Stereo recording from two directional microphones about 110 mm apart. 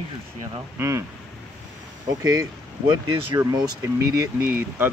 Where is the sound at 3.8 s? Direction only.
30° right (ahead or behind).